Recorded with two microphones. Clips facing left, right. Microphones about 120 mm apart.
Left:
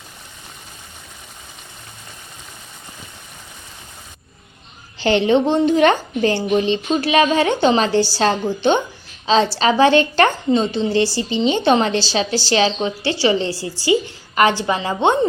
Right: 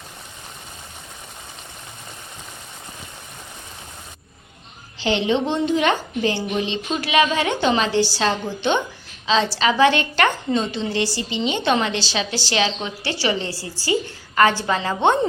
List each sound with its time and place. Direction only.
4.9 s a woman's voice: 50° left (ahead or behind); by 14.8 s 20° left (ahead or behind)